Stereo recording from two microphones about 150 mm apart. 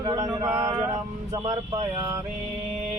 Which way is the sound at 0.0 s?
25° right (ahead or behind).